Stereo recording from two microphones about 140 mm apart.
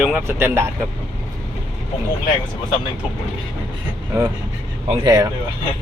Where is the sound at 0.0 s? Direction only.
15° right (ahead or behind).